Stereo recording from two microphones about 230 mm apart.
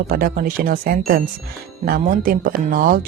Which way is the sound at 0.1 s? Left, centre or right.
Right.